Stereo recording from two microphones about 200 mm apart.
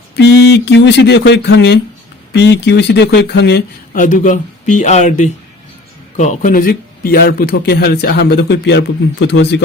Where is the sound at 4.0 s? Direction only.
40° left (ahead or behind).